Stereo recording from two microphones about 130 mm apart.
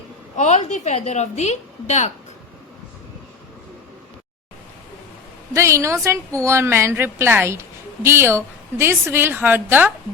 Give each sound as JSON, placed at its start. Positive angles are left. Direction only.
{"t": 0.3, "sound": "a woman's voice", "side_deg": 65}
{"t": 5.5, "sound": "a woman's voice", "side_deg": -20}